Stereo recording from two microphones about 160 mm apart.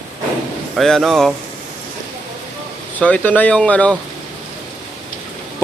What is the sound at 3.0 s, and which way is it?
Speech, 10° left (ahead or behind).